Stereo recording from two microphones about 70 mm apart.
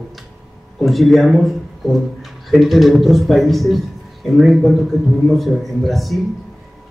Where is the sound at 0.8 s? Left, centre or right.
Centre.